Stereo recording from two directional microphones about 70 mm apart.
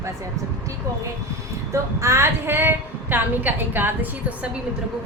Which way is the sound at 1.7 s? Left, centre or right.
Right.